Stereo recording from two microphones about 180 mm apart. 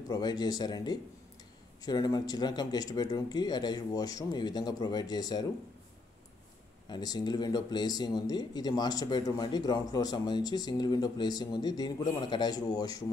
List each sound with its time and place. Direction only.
0.1 s speech: 20° left (ahead or behind)
6.9 s speech: 20° left (ahead or behind)